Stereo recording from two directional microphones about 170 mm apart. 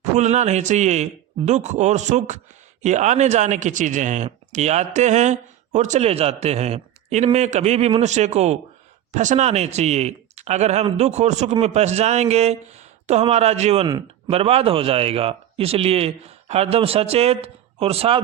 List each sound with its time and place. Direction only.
0.2 s speech: 45° right (ahead or behind)